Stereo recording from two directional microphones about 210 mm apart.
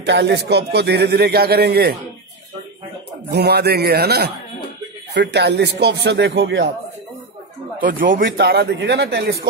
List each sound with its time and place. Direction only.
0.0 s a man's voice: 55° right (ahead or behind)
3.3 s a man's voice: 50° right (ahead or behind)
8.2 s a man's voice: 50° right (ahead or behind)